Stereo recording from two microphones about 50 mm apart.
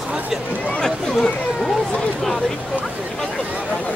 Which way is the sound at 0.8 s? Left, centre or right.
Centre.